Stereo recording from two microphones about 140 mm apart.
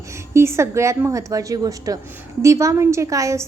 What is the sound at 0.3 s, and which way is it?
A woman's voice, 20° right (ahead or behind).